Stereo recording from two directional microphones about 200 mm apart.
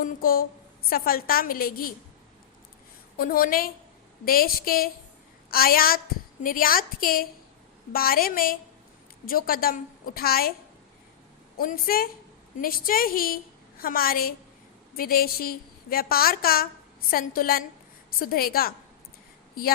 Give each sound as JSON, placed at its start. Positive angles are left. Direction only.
{"t": 0.0, "sound": "a woman's voice", "side_deg": 45}
{"t": 3.2, "sound": "a woman's voice", "side_deg": 45}
{"t": 11.5, "sound": "a woman's voice", "side_deg": 45}